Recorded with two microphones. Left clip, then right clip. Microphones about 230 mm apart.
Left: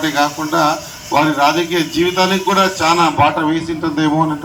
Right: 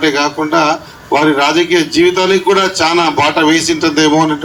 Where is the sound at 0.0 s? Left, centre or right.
Right.